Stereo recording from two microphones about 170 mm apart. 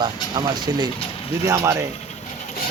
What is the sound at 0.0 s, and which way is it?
A man's voice, 25° right (ahead or behind).